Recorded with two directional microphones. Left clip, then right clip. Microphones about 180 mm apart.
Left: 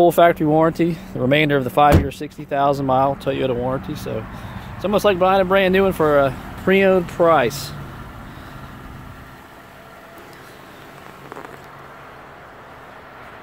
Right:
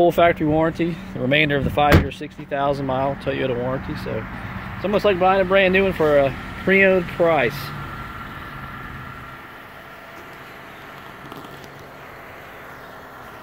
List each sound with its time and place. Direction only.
0.0 s speech: 25° left (ahead or behind)